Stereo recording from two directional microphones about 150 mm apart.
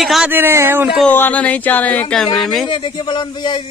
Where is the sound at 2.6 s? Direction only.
30° left (ahead or behind).